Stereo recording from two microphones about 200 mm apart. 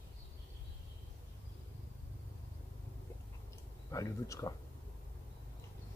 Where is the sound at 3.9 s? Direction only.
15° left (ahead or behind).